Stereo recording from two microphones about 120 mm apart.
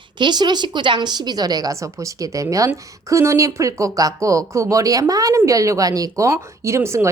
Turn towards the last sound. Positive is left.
turn(degrees=-25)  # may be behind; listen again after turning